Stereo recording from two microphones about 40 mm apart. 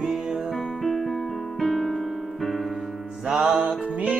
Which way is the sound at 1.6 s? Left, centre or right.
Centre.